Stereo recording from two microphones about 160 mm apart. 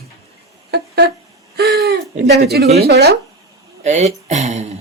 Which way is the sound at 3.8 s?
45° right (ahead or behind).